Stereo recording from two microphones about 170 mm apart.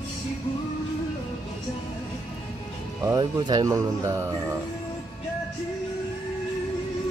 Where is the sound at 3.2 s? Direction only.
25° right (ahead or behind).